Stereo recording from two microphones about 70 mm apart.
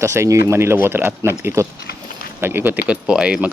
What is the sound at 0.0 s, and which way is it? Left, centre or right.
Speech, right.